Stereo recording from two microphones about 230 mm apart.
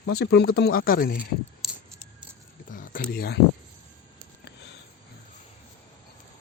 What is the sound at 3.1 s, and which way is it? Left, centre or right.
Speech, left.